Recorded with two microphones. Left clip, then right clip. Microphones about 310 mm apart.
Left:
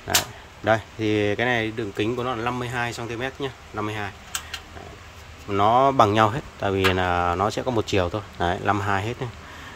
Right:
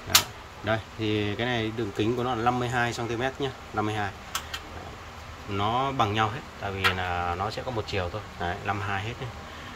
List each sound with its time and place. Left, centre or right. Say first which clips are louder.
0.7 s speech: left 7 dB; centre
5.5 s speech: left 9 dB; centre